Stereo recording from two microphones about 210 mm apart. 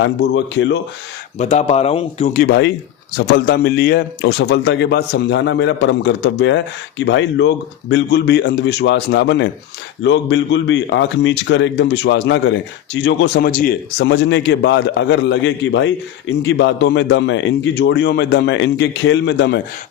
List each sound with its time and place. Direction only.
0.0 s speech: 60° left (ahead or behind)
1.4 s speech: 30° left (ahead or behind)
2.3 s speech: 45° left (ahead or behind)